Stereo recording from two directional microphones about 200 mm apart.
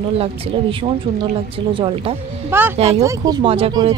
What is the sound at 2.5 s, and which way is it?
Speech, 10° right (ahead or behind).